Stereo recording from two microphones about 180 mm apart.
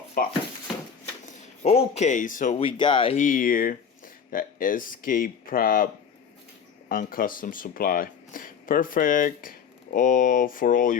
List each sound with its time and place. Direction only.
0.2 s speech: 55° left (ahead or behind)
1.6 s speech: 35° left (ahead or behind)
2.6 s speech: 30° left (ahead or behind)
3.2 s speech: 50° left (ahead or behind)